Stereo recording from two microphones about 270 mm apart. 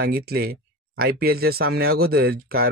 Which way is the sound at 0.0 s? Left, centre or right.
Right.